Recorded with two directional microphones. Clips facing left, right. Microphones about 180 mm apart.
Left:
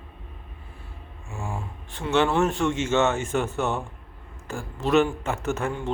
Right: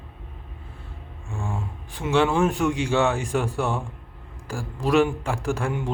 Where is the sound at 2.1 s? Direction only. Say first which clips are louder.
Right 1 dB; centre (ahead or behind).